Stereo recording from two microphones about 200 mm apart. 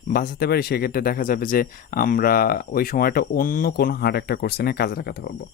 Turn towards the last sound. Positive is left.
turn(degrees=50)  # may be behind; listen again after turning